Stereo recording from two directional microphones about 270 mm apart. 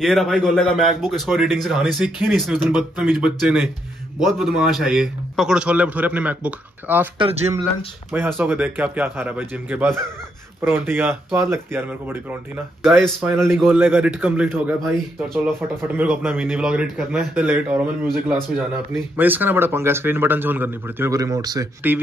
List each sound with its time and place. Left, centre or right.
0.0 s a man's voice: centre
7.2 s speech: right
8.1 s a man's voice: centre